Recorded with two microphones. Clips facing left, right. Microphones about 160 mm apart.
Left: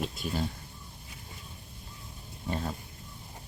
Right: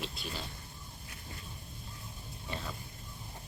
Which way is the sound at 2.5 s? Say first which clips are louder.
Left 7 dB; 40° left (ahead or behind).